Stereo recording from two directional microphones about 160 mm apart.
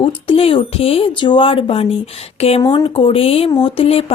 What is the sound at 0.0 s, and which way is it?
Speech, 35° left (ahead or behind).